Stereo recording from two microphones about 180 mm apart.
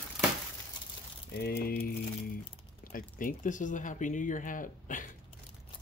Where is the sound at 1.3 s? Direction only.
60° left (ahead or behind).